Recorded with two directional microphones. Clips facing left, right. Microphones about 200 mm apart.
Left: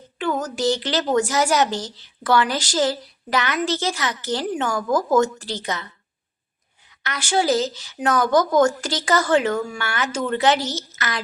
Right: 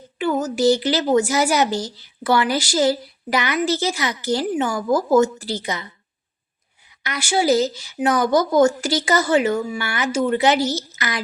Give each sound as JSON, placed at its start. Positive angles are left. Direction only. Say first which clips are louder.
{"t": 0.2, "sound": "a woman's voice", "louder": "right 4 dB", "side_deg": -10}
{"t": 7.0, "sound": "a woman's voice", "louder": "right 1 dB", "side_deg": -10}